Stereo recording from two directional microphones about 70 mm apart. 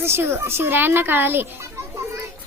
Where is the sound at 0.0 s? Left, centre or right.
Right.